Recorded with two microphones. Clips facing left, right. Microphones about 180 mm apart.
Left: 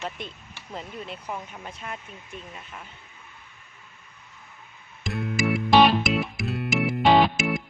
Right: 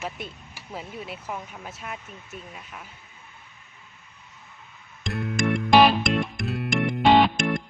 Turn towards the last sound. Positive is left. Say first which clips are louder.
# right 1 dB
turn(degrees=5)  # may be behind; listen again after turning